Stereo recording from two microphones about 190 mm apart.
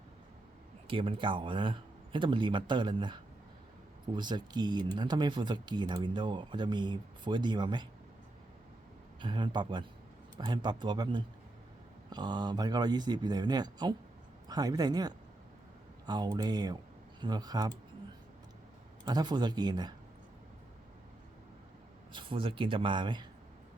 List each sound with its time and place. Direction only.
0.9 s speech: 30° right (ahead or behind)
9.2 s speech: 25° right (ahead or behind)
19.0 s speech: 20° right (ahead or behind)
22.1 s speech: 25° right (ahead or behind)